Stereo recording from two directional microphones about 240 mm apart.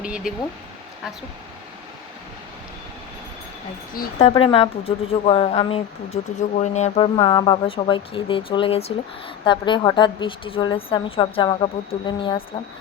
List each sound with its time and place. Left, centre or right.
0.0 s speech: centre
3.9 s speech: left